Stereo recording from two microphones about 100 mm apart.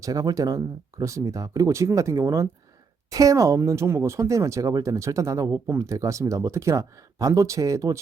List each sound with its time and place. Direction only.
0.0 s speech: 35° right (ahead or behind)